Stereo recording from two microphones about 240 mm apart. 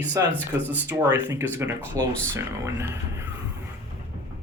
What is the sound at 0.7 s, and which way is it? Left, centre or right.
Speech, centre.